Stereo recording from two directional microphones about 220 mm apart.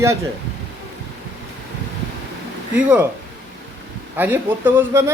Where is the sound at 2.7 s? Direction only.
5° right (ahead or behind).